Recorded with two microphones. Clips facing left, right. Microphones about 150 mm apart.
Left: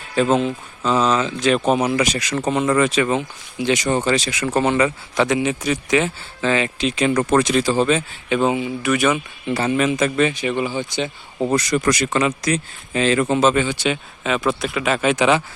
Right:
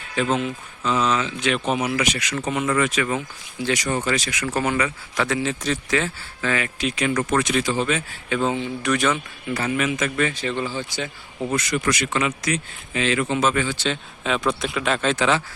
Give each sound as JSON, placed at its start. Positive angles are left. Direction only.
{"t": 0.2, "sound": "speech", "side_deg": 35}
{"t": 8.3, "sound": "speech", "side_deg": 15}
{"t": 9.5, "sound": "speech", "side_deg": 30}
{"t": 10.2, "sound": "speech", "side_deg": 15}
{"t": 11.3, "sound": "speech", "side_deg": 35}
{"t": 13.4, "sound": "speech", "side_deg": 25}
{"t": 14.3, "sound": "speech", "side_deg": 0}
{"t": 15.1, "sound": "speech", "side_deg": 15}